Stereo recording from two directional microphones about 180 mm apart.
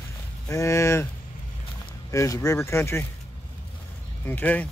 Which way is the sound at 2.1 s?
20° left (ahead or behind).